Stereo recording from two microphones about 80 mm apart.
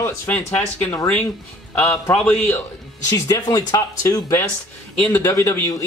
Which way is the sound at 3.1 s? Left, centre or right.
Left.